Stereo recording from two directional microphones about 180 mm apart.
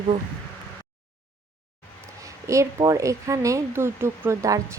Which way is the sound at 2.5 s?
20° right (ahead or behind).